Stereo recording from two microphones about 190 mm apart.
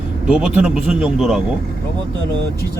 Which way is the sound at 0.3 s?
5° right (ahead or behind).